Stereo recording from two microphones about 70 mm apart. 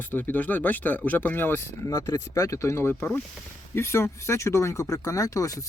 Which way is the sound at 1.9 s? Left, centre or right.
Left.